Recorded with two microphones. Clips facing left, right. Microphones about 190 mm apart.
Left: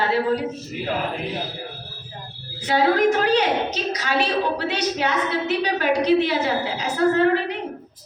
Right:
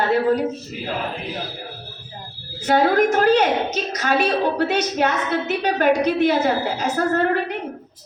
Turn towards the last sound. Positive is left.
turn(degrees=-45)  # may be behind; listen again after turning